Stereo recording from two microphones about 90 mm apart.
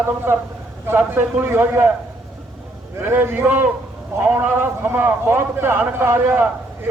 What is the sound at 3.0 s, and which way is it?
A man's voice, 25° right (ahead or behind).